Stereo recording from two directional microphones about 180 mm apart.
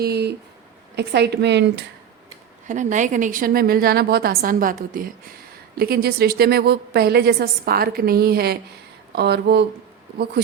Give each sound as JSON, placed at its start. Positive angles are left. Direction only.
{"t": 0.0, "sound": "a woman's voice", "side_deg": -65}
{"t": 2.6, "sound": "a woman's voice", "side_deg": -45}